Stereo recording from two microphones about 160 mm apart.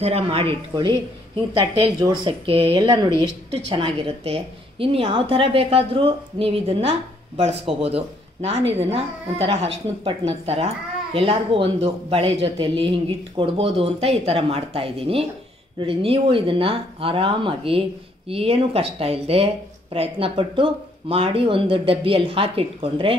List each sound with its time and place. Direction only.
0.0 s speech: 40° right (ahead or behind)